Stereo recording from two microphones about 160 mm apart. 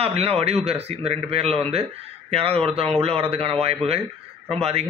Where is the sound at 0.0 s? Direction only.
40° right (ahead or behind).